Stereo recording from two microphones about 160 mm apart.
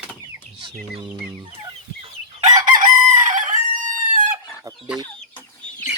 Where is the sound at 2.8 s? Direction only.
50° right (ahead or behind).